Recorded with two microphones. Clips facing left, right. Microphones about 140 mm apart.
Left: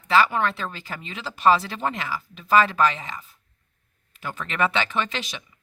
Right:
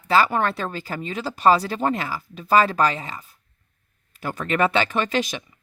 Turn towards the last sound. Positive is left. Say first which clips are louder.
# right 5 dB
turn(degrees=-45)  # may be behind; listen again after turning